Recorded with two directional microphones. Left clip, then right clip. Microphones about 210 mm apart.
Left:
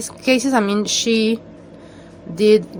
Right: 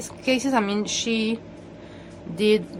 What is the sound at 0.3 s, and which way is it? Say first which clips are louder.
Speech: left 6 dB; 20° left (ahead or behind).